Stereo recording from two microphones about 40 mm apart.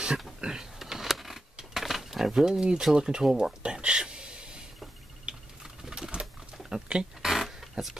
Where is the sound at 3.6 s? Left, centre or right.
Right.